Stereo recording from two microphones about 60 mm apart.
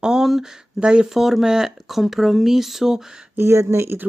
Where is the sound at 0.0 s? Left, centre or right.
Centre.